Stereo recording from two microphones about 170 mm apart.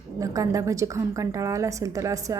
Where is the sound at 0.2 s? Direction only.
20° right (ahead or behind).